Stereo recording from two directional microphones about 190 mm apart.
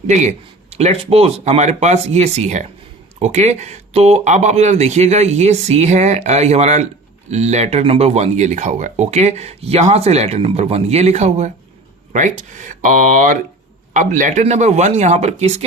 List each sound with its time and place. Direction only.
0.1 s speech: 40° right (ahead or behind)